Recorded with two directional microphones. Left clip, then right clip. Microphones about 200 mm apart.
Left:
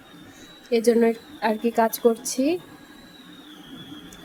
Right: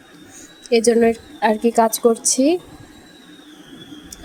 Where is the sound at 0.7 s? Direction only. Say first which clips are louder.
Right 5 dB; 15° right (ahead or behind).